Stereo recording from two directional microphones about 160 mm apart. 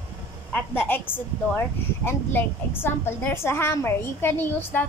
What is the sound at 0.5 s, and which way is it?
A woman's voice, 10° left (ahead or behind).